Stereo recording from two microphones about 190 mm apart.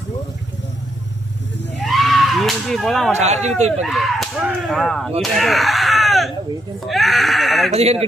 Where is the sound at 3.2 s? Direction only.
35° right (ahead or behind).